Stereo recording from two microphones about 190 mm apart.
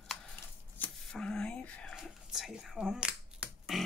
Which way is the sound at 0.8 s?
5° left (ahead or behind).